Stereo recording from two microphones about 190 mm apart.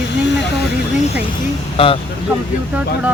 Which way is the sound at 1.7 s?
30° left (ahead or behind).